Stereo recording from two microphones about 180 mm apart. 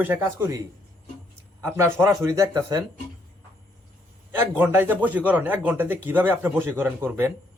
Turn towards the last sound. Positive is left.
turn(degrees=-10)  # may be behind; listen again after turning